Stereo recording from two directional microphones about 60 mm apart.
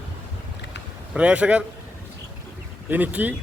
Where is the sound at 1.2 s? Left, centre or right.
Centre.